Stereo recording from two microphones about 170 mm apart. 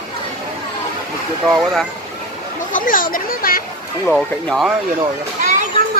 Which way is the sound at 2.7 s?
55° left (ahead or behind).